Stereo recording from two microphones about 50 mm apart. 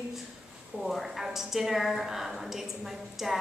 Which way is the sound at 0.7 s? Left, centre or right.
Centre.